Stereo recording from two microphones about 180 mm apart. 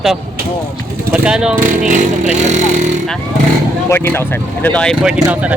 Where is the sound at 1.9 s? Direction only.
45° right (ahead or behind).